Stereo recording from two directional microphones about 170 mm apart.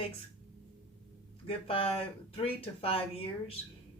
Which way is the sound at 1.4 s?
35° left (ahead or behind).